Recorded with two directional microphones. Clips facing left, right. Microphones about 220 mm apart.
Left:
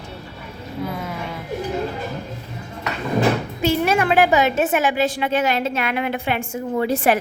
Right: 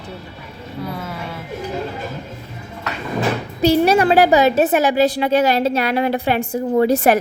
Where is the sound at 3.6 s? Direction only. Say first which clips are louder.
Right 6 dB; 35° right (ahead or behind).